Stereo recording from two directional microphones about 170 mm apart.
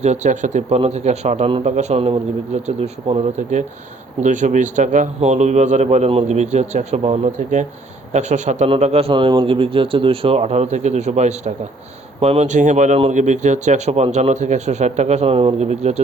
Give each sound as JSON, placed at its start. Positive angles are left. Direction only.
{"t": 0.0, "sound": "speech", "side_deg": -45}